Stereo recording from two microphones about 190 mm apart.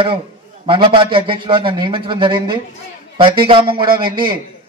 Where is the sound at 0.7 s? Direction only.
25° right (ahead or behind).